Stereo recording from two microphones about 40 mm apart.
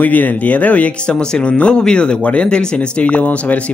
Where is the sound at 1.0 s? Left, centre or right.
Left.